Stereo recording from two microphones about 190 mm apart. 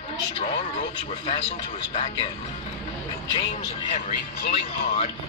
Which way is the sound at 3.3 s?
30° left (ahead or behind).